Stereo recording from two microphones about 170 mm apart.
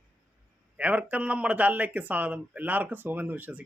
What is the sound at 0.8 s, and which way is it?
A man's voice, 10° right (ahead or behind).